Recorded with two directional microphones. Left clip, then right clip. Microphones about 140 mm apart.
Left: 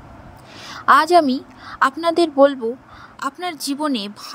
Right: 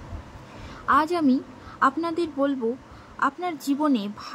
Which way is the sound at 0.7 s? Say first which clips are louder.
Left 8 dB; 60° left (ahead or behind).